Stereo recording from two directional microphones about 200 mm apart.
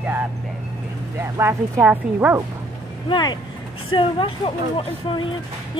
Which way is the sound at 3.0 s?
25° left (ahead or behind).